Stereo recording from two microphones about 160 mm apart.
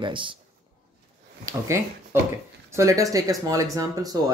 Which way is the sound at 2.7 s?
20° right (ahead or behind).